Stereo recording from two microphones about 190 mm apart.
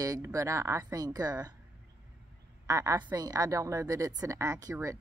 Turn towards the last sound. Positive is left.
turn(degrees=-15)  # may be behind; listen again after turning